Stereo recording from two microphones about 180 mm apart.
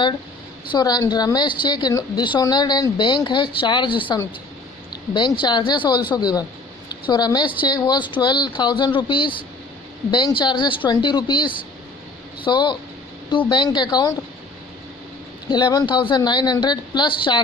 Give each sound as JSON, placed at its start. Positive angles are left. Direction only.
{"t": 0.7, "sound": "a woman's voice", "side_deg": 20}
{"t": 15.4, "sound": "a woman's voice", "side_deg": 25}